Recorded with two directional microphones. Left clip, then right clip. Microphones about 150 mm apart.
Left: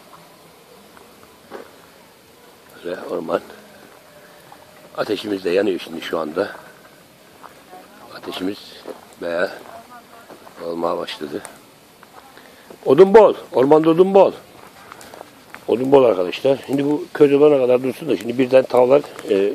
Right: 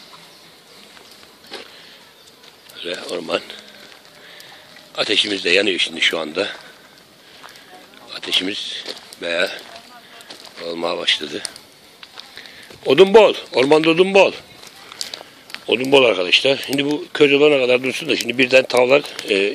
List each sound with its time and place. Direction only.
3.1 s speech: 5° right (ahead or behind)
4.9 s speech: 5° right (ahead or behind)
8.2 s speech: 10° right (ahead or behind)
10.6 s speech: 35° right (ahead or behind)
10.9 s speech: 5° right (ahead or behind)
12.8 s speech: 10° right (ahead or behind)
15.6 s speech: 5° right (ahead or behind)